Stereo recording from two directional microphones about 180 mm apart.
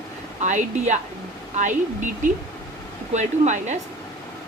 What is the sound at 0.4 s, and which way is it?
Speech, 40° right (ahead or behind).